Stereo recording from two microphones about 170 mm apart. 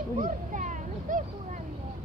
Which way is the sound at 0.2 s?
50° right (ahead or behind).